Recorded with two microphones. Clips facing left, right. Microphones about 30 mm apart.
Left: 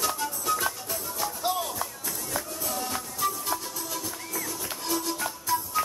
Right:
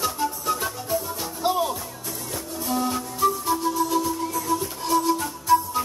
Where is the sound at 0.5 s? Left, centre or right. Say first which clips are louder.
Left 3 dB; right.